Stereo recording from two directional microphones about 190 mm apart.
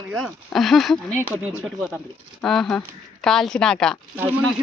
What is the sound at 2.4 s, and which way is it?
Speech, centre (ahead or behind).